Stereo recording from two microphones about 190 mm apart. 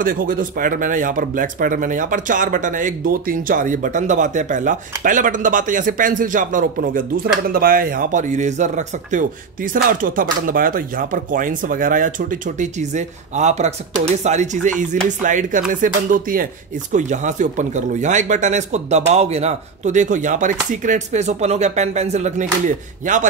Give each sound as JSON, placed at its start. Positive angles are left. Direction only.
{"t": 0.0, "sound": "speech", "side_deg": -45}